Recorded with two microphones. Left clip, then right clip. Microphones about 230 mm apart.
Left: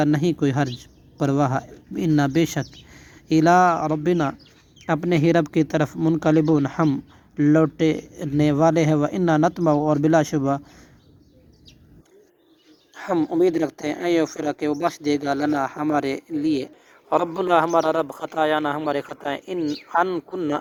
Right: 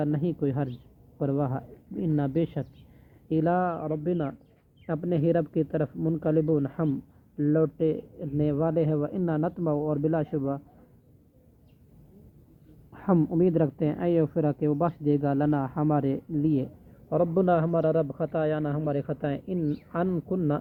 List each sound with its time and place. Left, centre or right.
0.0 s speech: left
13.0 s a man's voice: left